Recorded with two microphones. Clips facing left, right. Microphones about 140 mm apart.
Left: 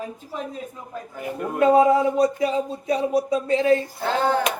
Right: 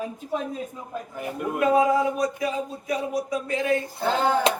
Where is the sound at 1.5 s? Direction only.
30° left (ahead or behind).